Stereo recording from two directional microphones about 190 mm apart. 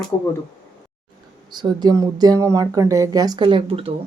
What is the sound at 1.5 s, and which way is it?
Speech, 20° right (ahead or behind).